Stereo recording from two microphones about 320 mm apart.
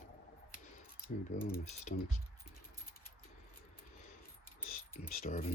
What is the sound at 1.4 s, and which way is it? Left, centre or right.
Speech, left.